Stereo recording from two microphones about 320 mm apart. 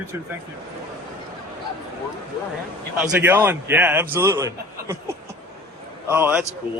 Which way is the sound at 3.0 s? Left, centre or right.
Centre.